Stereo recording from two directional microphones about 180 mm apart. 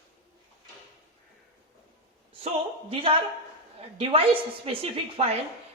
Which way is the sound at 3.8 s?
30° right (ahead or behind).